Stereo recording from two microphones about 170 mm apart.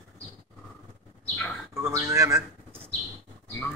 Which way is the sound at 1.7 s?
15° right (ahead or behind).